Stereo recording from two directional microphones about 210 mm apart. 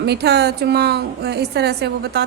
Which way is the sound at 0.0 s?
50° right (ahead or behind).